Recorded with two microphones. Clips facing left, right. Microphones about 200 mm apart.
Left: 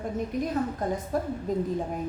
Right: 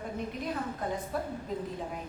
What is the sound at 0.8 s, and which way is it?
Speech, 45° left (ahead or behind).